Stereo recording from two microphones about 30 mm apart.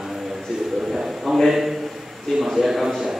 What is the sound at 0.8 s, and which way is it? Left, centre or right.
Bird, centre.